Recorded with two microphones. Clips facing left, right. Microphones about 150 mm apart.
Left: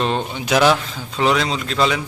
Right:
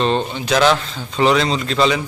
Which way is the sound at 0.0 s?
10° left (ahead or behind).